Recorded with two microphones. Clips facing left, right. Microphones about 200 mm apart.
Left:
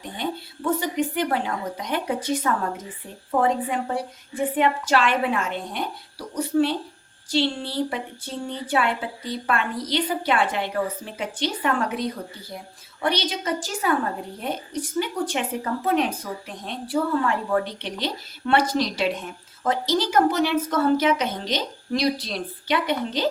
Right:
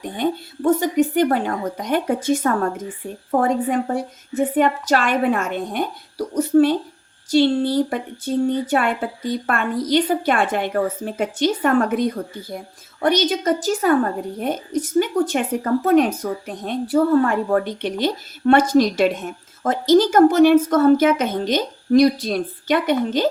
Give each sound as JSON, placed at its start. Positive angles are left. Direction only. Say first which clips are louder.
{"t": 0.0, "sound": "a woman's voice", "louder": "right 7 dB", "side_deg": -50}